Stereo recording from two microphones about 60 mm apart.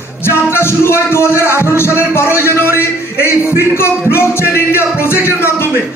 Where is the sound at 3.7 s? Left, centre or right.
Left.